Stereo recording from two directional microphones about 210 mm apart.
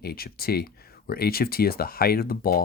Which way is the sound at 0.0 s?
45° left (ahead or behind).